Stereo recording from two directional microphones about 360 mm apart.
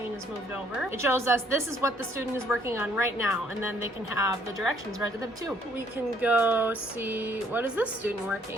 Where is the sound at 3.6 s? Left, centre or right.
Left.